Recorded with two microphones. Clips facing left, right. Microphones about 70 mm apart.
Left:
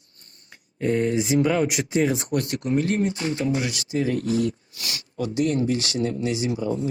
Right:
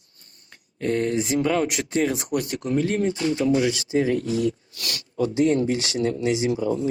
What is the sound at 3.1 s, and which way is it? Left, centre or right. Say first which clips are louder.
Speech: right 4 dB; left.